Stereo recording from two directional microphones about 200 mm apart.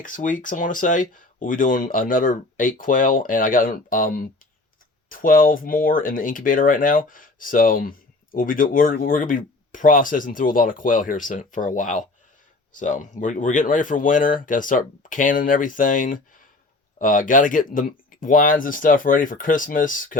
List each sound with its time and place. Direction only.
0.0 s speech: 40° left (ahead or behind)